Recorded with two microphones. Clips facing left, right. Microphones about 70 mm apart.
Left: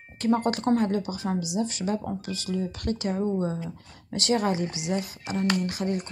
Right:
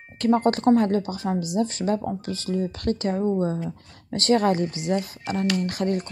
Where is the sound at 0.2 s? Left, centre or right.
Right.